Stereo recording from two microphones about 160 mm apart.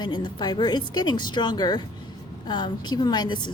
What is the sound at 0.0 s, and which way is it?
A woman's voice, 25° left (ahead or behind).